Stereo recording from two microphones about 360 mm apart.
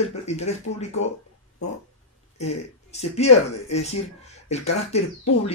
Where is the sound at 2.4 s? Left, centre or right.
Centre.